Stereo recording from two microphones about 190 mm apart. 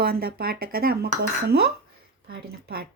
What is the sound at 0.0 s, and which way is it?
Speech, 55° right (ahead or behind).